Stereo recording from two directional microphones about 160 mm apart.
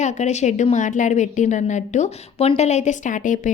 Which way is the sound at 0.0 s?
50° left (ahead or behind).